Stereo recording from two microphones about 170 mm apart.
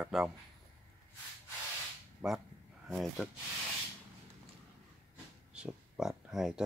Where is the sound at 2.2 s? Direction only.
5° right (ahead or behind).